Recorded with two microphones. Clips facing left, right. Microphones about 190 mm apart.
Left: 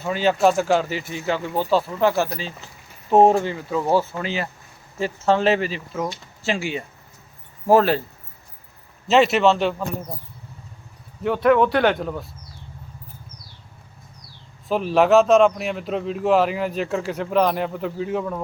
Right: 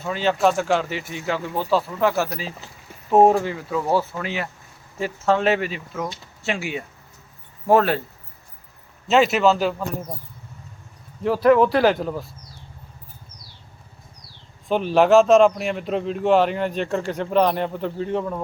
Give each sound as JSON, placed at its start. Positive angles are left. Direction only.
{"t": 0.0, "sound": "a man's voice", "side_deg": 5}
{"t": 9.0, "sound": "a man's voice", "side_deg": 0}
{"t": 11.2, "sound": "a man's voice", "side_deg": 0}
{"t": 14.7, "sound": "a man's voice", "side_deg": 0}